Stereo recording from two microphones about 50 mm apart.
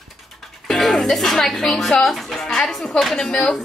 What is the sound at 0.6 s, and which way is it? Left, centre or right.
Speech, centre.